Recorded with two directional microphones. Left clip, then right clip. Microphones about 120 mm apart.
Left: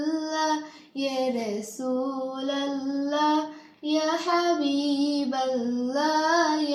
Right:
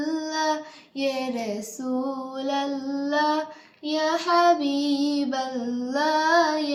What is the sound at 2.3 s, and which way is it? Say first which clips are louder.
Female singing: right 2 dB; 20° right (ahead or behind).